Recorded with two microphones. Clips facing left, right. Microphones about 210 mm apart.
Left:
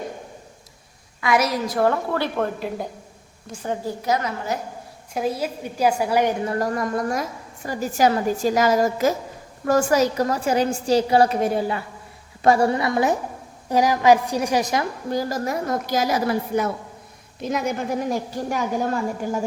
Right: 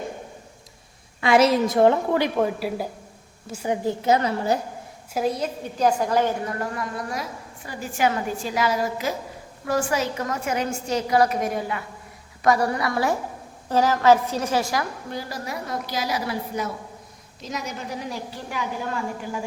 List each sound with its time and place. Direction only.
1.2 s a woman's voice: 25° right (ahead or behind); by 3.8 s 10° right (ahead or behind)
3.8 s a woman's voice: 25° right (ahead or behind)
5.1 s a woman's voice: centre (ahead or behind)
6.4 s a woman's voice: 35° left (ahead or behind)
15.1 s a woman's voice: 45° left (ahead or behind)